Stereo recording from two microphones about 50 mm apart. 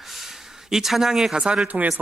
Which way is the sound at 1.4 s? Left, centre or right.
Right.